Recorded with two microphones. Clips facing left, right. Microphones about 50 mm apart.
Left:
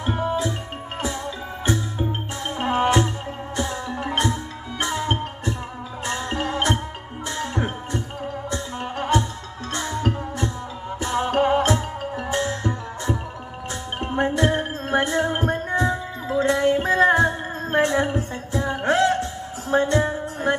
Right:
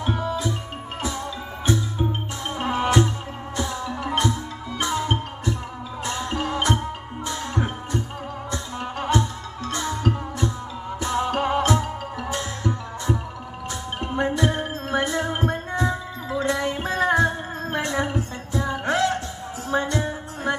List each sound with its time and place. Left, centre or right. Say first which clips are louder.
0.0 s music: left 2 dB; left
2.4 s music: left 3 dB; left